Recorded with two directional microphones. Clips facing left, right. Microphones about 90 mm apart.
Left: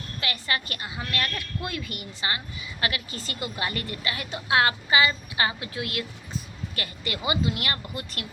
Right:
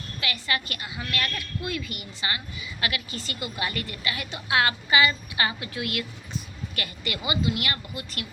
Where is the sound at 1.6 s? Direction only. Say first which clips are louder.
Right 1 dB; 45° left (ahead or behind).